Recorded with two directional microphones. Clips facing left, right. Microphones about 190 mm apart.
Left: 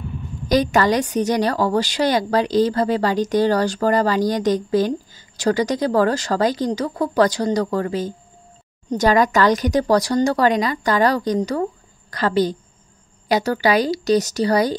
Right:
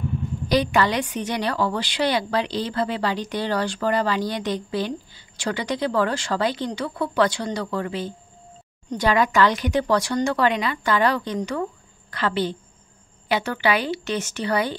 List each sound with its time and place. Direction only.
0.5 s a woman's voice: 45° left (ahead or behind)